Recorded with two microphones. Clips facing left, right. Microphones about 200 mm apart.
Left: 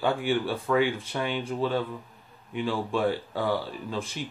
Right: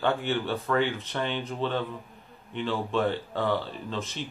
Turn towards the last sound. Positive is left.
turn(degrees=10)  # may be behind; listen again after turning